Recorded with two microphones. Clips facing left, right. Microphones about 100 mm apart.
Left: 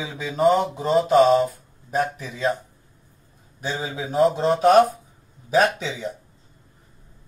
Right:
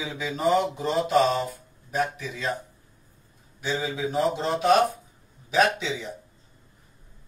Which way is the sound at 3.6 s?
35° left (ahead or behind).